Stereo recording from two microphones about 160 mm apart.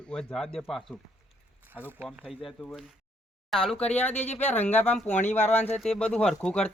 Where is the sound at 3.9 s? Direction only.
10° left (ahead or behind).